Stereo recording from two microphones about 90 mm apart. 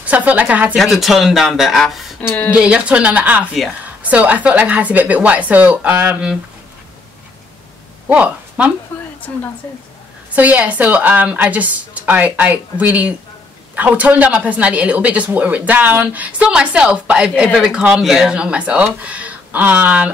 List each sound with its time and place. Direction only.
0.0 s speech: 15° right (ahead or behind)
0.7 s speech: centre (ahead or behind)
2.5 s speech: 15° right (ahead or behind)
8.1 s a woman's voice: 15° right (ahead or behind)
10.3 s speech: 15° right (ahead or behind)